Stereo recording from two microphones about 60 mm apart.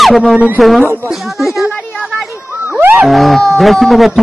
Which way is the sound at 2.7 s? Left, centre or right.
Right.